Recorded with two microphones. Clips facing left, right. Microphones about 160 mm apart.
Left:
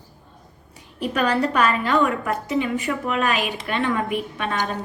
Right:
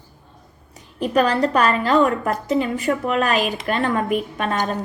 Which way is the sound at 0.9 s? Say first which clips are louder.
Right 3 dB; 40° right (ahead or behind).